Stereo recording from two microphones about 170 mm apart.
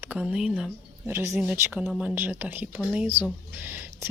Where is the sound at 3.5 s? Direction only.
10° right (ahead or behind).